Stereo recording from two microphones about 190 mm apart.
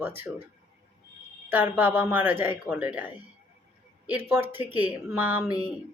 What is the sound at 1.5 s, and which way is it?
A woman's voice, 10° right (ahead or behind).